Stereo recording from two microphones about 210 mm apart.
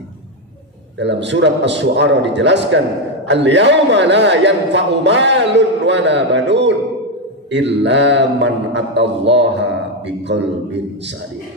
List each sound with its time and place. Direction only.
0.9 s a man's voice: 55° right (ahead or behind)